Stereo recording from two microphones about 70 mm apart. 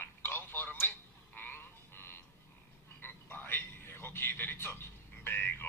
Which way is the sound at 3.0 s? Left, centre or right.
Left.